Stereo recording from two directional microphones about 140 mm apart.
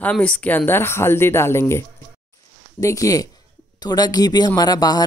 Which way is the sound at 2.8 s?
25° left (ahead or behind).